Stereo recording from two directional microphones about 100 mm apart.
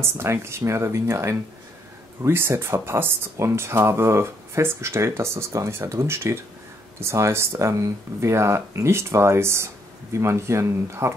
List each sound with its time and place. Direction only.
0.0 s speech: 25° right (ahead or behind)